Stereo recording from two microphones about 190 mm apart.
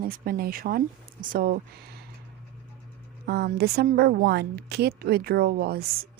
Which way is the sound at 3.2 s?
55° right (ahead or behind).